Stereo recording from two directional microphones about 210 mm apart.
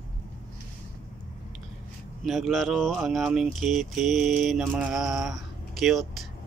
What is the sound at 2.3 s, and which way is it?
Speech, centre (ahead or behind).